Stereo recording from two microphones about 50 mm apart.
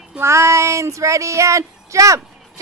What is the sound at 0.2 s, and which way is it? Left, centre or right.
Child singing, right.